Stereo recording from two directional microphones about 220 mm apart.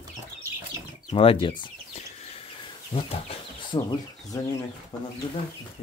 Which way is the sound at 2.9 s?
25° left (ahead or behind).